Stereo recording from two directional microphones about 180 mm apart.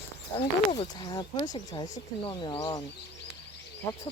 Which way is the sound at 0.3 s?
30° left (ahead or behind).